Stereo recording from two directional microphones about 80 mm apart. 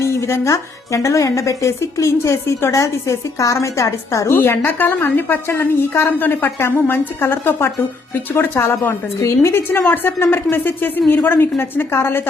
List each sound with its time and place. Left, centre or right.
0.0 s speech: left
4.4 s a woman's voice: left
5.5 s a woman's voice: left